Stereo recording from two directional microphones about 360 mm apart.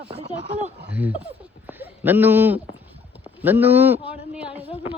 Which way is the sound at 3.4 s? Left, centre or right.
Centre.